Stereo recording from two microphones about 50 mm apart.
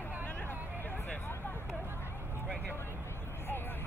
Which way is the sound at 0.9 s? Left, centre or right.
Left.